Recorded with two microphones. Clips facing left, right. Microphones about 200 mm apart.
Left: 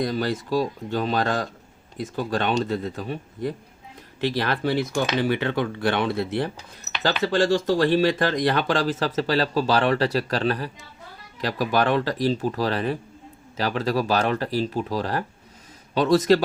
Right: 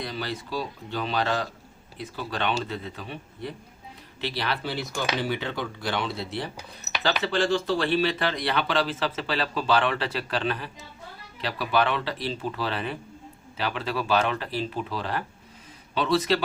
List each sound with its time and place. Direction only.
0.0 s speech: 45° left (ahead or behind)
7.0 s speech: 40° left (ahead or behind)